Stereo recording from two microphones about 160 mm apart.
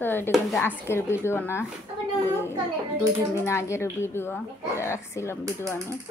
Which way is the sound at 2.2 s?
15° left (ahead or behind).